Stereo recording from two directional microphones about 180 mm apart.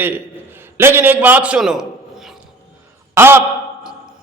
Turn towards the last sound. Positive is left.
turn(degrees=-15)  # may be behind; listen again after turning